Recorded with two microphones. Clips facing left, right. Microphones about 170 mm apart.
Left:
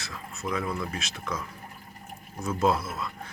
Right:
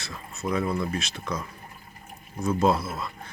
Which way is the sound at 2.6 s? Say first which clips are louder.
Right 2 dB; centre (ahead or behind).